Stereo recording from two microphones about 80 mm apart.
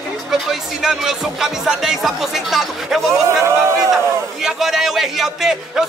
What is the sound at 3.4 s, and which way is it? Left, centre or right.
Speech, right.